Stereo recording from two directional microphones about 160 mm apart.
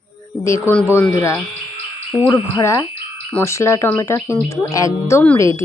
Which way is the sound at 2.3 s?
20° left (ahead or behind).